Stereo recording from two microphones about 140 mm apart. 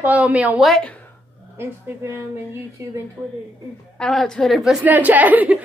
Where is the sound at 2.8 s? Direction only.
20° right (ahead or behind).